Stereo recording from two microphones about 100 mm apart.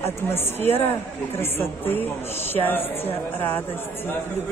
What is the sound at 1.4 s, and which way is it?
A woman's voice, 25° left (ahead or behind).